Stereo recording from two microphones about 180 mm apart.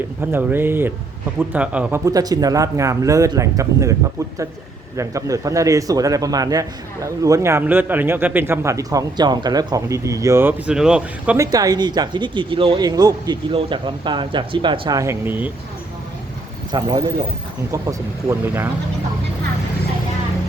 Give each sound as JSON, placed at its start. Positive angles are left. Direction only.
{"t": 0.2, "sound": "a man's voice", "side_deg": -10}
{"t": 2.0, "sound": "a man's voice", "side_deg": -20}
{"t": 4.9, "sound": "a man's voice", "side_deg": -20}
{"t": 11.3, "sound": "speech", "side_deg": -20}
{"t": 16.7, "sound": "a man's voice", "side_deg": -25}